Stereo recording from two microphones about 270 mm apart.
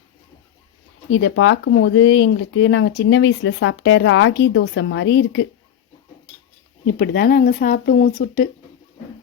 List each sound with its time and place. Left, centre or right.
1.1 s speech: left
7.0 s speech: left